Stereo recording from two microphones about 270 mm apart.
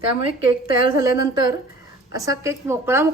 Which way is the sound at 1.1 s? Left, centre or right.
Centre.